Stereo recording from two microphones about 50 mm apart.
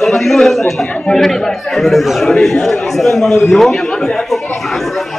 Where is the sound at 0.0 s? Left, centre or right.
Centre.